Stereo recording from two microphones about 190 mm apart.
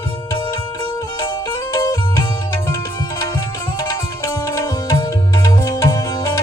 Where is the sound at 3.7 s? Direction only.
20° left (ahead or behind).